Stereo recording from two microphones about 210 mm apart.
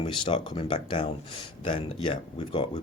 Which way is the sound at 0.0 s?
20° left (ahead or behind).